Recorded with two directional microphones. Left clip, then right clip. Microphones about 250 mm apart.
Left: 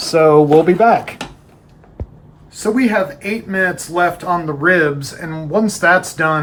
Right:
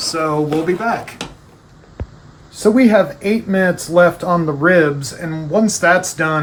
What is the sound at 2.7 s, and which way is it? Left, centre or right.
Speech, centre.